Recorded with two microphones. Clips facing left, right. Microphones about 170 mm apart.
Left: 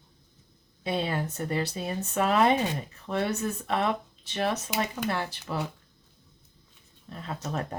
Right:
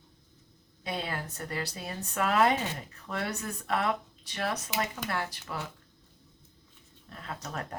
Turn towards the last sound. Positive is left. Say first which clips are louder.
# left 5 dB
turn(degrees=25)  # may be behind; listen again after turning